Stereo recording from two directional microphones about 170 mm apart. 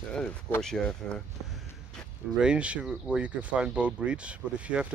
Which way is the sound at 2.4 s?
5° right (ahead or behind).